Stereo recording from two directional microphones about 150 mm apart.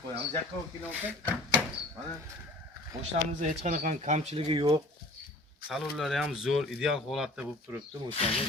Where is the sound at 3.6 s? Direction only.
55° right (ahead or behind); by 4.7 s 40° right (ahead or behind).